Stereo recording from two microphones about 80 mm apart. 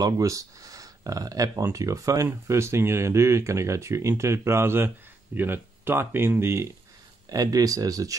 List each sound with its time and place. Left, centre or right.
0.0 s speech: right
7.2 s speech: right